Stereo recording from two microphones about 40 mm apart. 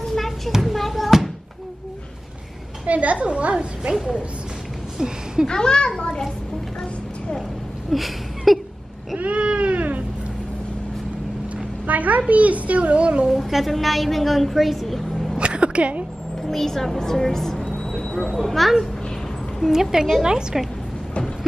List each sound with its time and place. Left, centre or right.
0.6 s a sound: centre
2.9 s a child's voice: right
3.9 s a woman's voice: centre
5.5 s a child's voice: centre
7.9 s a sound: centre
9.2 s cat: right
11.5 s a sound: right
12.3 s a child's voice: right
13.5 s a woman's voice: centre
15.3 s a sound: right
16.4 s a woman's voice: centre
19.7 s a woman's voice: centre